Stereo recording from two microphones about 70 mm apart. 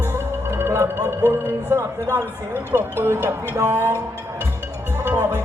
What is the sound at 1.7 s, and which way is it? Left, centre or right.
Speech, right.